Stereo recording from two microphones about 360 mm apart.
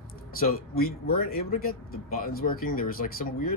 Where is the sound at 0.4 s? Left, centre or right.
Left.